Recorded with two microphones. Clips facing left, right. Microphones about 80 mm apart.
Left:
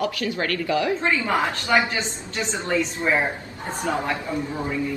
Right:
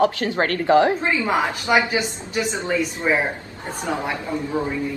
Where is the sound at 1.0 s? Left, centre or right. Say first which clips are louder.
Right 1 dB; centre.